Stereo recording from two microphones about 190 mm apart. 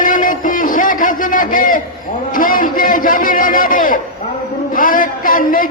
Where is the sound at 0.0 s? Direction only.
45° left (ahead or behind).